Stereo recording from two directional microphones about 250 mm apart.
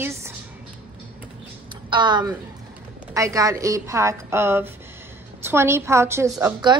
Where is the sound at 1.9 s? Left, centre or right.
Centre.